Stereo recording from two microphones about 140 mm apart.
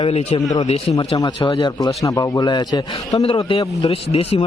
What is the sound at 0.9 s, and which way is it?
Speech, 30° left (ahead or behind).